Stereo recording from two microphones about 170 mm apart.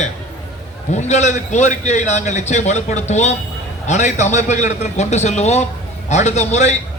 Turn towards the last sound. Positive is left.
turn(degrees=40)  # may be behind; listen again after turning